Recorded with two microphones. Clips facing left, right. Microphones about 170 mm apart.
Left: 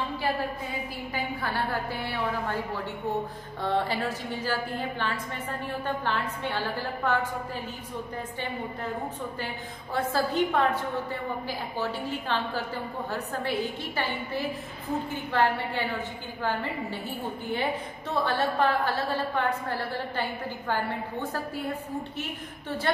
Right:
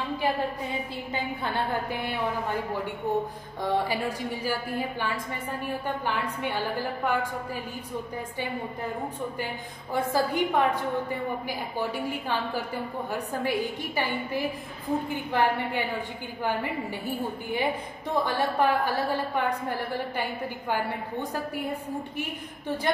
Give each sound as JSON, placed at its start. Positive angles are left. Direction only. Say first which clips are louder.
{"t": 1.1, "sound": "a woman's voice", "louder": "right 1 dB", "side_deg": -20}
{"t": 3.6, "sound": "a woman's voice", "louder": "right 1 dB", "side_deg": -10}
{"t": 9.9, "sound": "a woman's voice", "louder": "right 1 dB", "side_deg": -15}